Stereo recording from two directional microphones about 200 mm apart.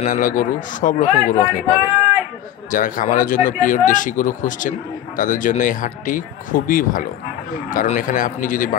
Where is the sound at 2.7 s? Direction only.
45° left (ahead or behind).